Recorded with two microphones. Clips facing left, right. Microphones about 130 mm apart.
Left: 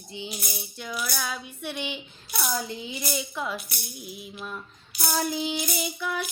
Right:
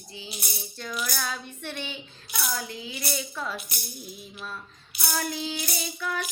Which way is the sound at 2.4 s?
20° left (ahead or behind).